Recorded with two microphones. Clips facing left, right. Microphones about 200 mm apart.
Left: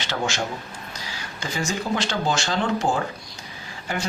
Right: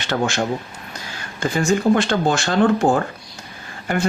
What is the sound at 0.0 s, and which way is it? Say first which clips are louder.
Speech: right 6 dB; 55° right (ahead or behind).